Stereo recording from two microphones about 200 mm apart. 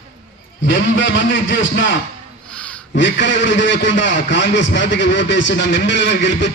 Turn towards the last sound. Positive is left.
turn(degrees=65)  # may be behind; listen again after turning